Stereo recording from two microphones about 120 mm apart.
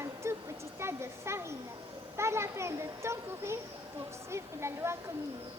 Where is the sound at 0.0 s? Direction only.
25° right (ahead or behind).